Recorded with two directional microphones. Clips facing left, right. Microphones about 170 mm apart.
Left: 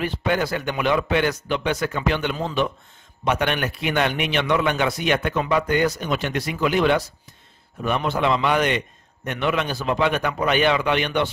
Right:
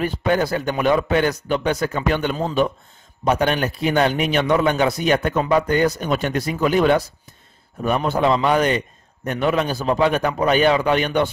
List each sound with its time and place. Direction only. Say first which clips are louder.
0.0 s a man's voice: right 3 dB; 40° right (ahead or behind)